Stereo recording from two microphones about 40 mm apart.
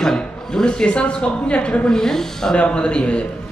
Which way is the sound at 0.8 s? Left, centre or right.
Left.